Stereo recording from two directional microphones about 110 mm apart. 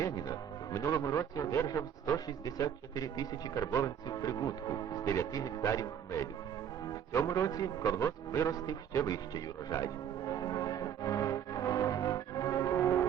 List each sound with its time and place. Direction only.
0.0 s a man's voice: 30° left (ahead or behind)
7.1 s music: 30° left (ahead or behind)